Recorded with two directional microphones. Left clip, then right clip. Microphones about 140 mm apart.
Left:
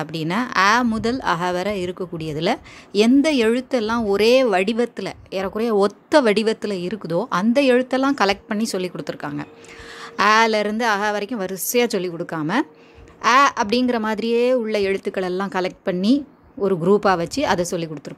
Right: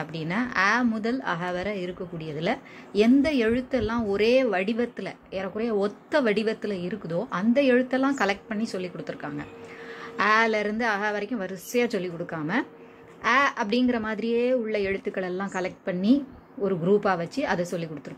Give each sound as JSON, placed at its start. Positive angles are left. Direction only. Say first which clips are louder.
{"t": 0.0, "sound": "a woman's voice", "louder": "left 6 dB", "side_deg": 50}